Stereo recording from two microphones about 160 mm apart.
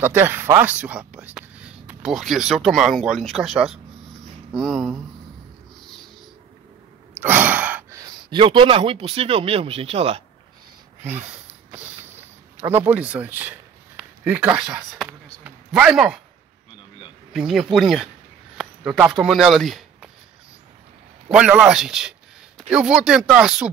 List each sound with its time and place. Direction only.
0.0 s speech: 15° right (ahead or behind)
7.2 s gasp: 10° right (ahead or behind)
8.0 s speech: 30° right (ahead or behind)
12.5 s a man's voice: 15° right (ahead or behind)
15.0 s a sound: 10° right (ahead or behind)
17.3 s speech: 5° right (ahead or behind)
21.3 s speech: 5° right (ahead or behind)